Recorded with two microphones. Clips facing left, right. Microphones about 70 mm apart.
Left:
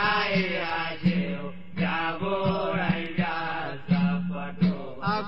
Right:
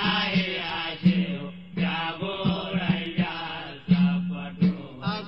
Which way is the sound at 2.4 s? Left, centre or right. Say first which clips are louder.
Even; left.